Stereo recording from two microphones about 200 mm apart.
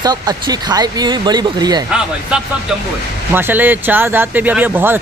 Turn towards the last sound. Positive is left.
turn(degrees=-10)  # may be behind; listen again after turning